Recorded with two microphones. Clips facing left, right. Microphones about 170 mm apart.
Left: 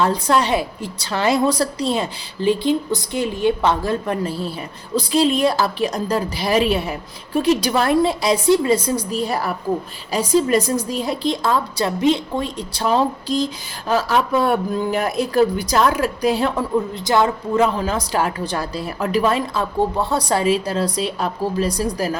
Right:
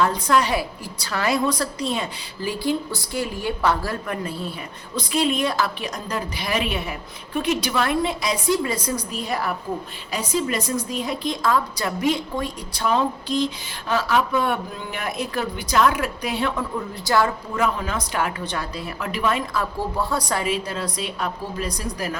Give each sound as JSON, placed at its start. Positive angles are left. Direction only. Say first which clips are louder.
{"t": 0.0, "sound": "a woman's voice", "louder": "left 2 dB", "side_deg": 30}
{"t": 17.1, "sound": "a woman's voice", "louder": "left 3 dB", "side_deg": 20}